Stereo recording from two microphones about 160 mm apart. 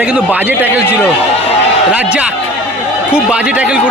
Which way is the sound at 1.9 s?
10° right (ahead or behind).